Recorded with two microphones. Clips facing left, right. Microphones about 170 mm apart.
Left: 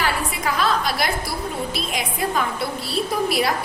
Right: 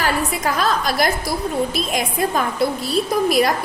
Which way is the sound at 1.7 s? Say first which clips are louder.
Right 5 dB; 45° right (ahead or behind).